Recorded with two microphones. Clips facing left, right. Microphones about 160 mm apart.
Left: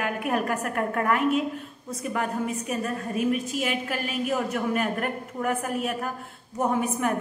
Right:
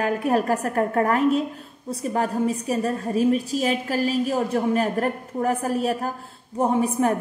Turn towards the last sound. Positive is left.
turn(degrees=-30)  # may be behind; listen again after turning